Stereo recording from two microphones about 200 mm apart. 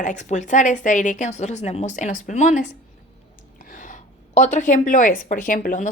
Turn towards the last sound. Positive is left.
turn(degrees=40)  # may be behind; listen again after turning